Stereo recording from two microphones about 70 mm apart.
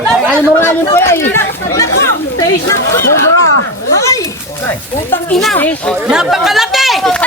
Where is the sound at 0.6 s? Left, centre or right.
Left.